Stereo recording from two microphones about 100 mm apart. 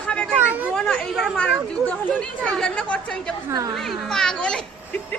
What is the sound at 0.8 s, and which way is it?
Speech, 5° left (ahead or behind).